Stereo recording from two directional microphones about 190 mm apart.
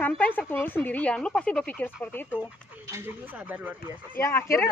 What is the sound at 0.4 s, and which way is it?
Speech, 10° left (ahead or behind).